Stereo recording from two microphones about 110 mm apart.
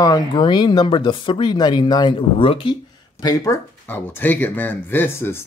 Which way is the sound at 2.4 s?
55° left (ahead or behind).